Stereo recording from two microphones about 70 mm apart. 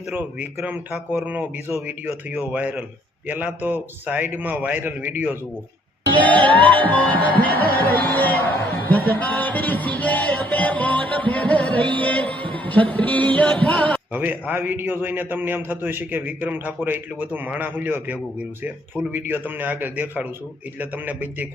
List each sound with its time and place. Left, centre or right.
0.1 s a man's voice: right
6.1 s music: left
14.1 s a man's voice: right